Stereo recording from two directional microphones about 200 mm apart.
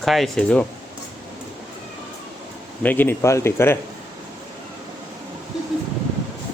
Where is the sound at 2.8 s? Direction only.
10° left (ahead or behind).